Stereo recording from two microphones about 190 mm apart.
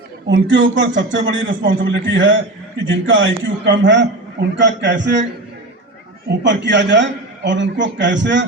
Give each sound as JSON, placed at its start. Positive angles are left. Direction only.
{"t": 0.3, "sound": "a man's voice", "side_deg": -75}
{"t": 6.4, "sound": "a man's voice", "side_deg": -70}